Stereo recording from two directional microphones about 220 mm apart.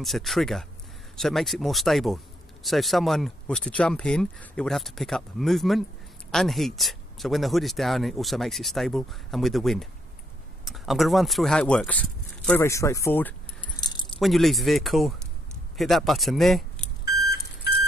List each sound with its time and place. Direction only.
0.0 s speech: centre (ahead or behind)
13.7 s keys jangling: 20° left (ahead or behind)
14.2 s speech: centre (ahead or behind)